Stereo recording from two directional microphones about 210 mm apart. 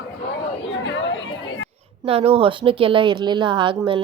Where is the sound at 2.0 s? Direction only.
25° right (ahead or behind).